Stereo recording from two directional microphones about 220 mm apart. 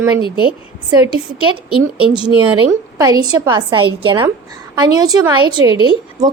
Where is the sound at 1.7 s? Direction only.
20° right (ahead or behind).